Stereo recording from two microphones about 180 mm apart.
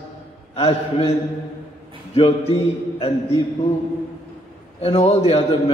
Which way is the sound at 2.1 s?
35° left (ahead or behind).